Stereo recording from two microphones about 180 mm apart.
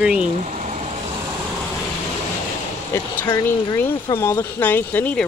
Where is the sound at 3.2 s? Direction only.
25° left (ahead or behind).